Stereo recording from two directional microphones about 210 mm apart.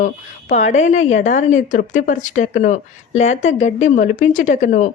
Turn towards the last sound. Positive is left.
turn(degrees=35)  # may be behind; listen again after turning